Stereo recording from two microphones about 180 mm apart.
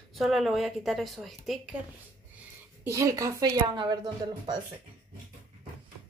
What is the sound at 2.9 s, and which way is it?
Speech, 20° right (ahead or behind).